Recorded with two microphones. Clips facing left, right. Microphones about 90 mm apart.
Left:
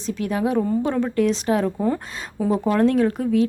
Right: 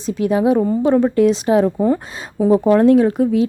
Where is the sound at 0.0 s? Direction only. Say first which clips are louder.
Right 7 dB; 20° right (ahead or behind).